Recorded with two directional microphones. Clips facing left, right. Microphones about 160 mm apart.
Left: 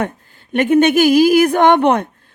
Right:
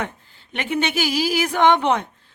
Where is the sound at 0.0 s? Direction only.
50° left (ahead or behind).